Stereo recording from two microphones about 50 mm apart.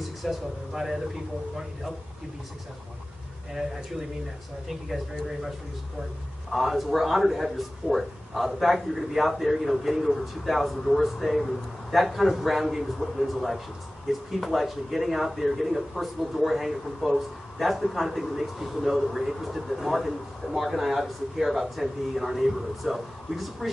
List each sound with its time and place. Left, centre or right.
0.2 s a man's voice: centre
4.6 s a man's voice: centre
6.5 s a man's voice: centre